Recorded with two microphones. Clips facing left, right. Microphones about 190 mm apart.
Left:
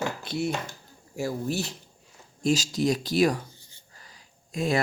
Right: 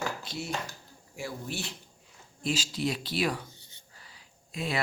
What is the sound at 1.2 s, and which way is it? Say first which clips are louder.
Speech: left 8 dB; 40° left (ahead or behind).